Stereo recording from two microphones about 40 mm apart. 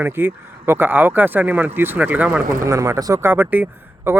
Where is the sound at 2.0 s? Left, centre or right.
Right.